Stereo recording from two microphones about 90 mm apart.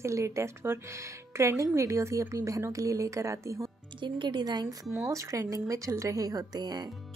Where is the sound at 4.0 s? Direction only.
65° right (ahead or behind).